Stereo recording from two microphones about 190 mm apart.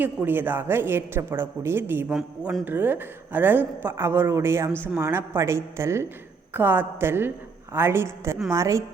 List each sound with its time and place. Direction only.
0.0 s a woman's voice: 10° right (ahead or behind)